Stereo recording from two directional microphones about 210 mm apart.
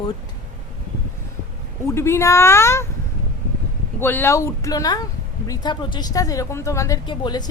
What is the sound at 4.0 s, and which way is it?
A woman's voice, 10° left (ahead or behind).